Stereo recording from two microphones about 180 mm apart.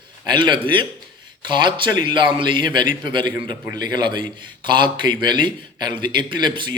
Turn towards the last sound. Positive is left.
turn(degrees=-25)  # may be behind; listen again after turning